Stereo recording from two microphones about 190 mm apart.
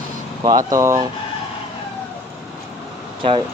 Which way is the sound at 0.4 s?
20° right (ahead or behind).